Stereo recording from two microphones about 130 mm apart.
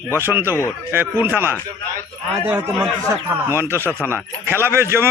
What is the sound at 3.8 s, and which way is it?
Speech, 15° left (ahead or behind).